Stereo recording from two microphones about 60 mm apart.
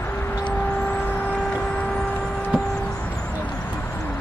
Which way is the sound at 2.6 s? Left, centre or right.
Centre.